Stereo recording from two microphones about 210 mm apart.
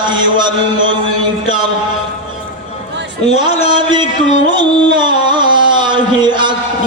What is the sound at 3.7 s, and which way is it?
Mantra, 20° right (ahead or behind).